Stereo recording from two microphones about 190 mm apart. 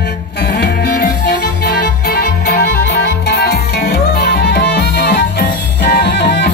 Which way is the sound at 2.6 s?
60° left (ahead or behind).